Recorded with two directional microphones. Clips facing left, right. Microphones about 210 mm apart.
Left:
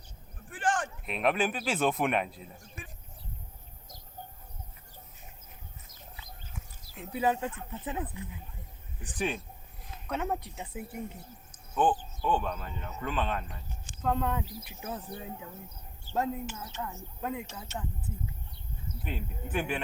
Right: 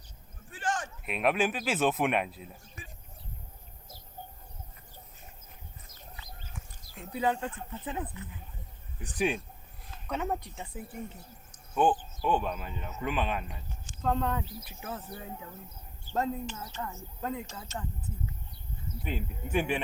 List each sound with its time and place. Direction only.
0.5 s a sound: 55° left (ahead or behind)
1.0 s a man's voice: 5° right (ahead or behind)
6.1 s a sound: 5° left (ahead or behind)
9.1 s speech: 10° right (ahead or behind)
10.1 s a man's voice: centre (ahead or behind)
11.7 s speech: 10° right (ahead or behind)
14.0 s speech: 5° left (ahead or behind)
15.1 s speech: 15° left (ahead or behind)
16.1 s speech: 5° left (ahead or behind)
19.0 s speech: 5° right (ahead or behind)